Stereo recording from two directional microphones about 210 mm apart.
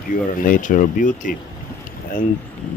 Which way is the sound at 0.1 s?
40° left (ahead or behind).